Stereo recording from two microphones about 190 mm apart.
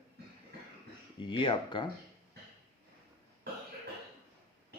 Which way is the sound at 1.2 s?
25° left (ahead or behind).